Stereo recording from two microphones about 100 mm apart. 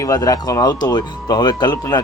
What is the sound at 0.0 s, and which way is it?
Speech, 35° left (ahead or behind).